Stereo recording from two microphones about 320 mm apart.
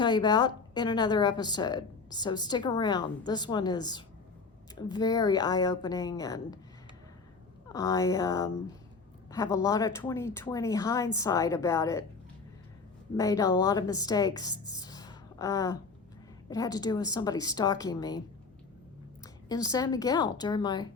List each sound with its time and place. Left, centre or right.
0.0 s a woman's voice: centre
7.7 s a woman's voice: centre
13.1 s a woman's voice: centre
19.5 s a woman's voice: centre